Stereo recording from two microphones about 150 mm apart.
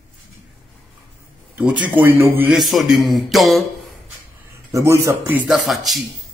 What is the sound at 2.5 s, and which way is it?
A man's voice, centre (ahead or behind).